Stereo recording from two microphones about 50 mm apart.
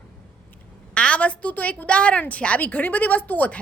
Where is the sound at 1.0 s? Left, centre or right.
Left.